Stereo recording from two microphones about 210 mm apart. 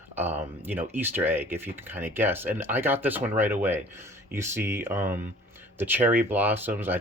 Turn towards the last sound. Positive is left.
turn(degrees=-10)  # may be behind; listen again after turning